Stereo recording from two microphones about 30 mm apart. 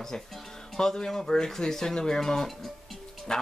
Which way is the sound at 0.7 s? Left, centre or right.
Left.